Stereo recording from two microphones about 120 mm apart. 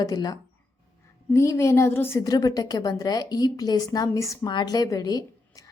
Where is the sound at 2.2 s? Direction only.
30° left (ahead or behind).